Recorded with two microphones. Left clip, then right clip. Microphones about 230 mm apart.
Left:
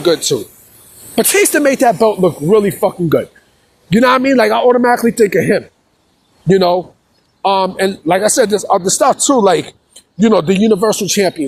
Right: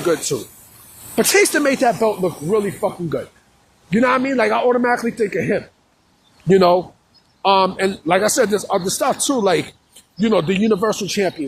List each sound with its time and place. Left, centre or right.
0.0 s a man's voice: left
2.5 s a man's voice: left
6.5 s a man's voice: left